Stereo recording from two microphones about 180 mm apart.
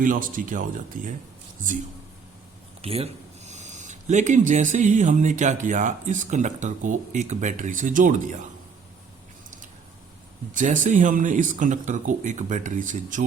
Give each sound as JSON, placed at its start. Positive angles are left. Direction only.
{"t": 0.0, "sound": "speech", "side_deg": -50}
{"t": 2.8, "sound": "speech", "side_deg": -35}
{"t": 10.5, "sound": "speech", "side_deg": -45}